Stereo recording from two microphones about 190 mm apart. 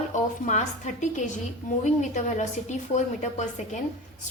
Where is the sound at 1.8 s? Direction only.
40° left (ahead or behind).